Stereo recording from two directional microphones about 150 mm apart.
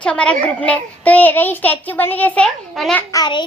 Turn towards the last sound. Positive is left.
turn(degrees=30)  # may be behind; listen again after turning